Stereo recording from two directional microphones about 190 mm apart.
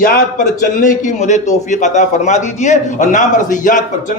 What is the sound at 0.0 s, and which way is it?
A man's voice, 45° left (ahead or behind).